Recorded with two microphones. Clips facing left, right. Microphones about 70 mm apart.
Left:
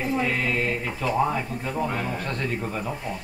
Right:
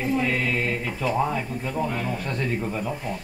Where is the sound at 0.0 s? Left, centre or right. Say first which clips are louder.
Right 1 dB; centre.